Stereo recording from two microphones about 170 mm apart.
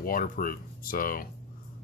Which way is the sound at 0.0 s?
55° left (ahead or behind).